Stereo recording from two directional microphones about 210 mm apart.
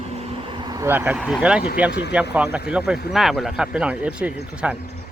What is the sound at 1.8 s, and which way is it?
Speech, 5° right (ahead or behind).